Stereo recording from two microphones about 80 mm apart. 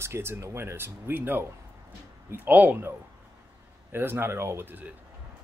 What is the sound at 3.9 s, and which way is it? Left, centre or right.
Speech, right.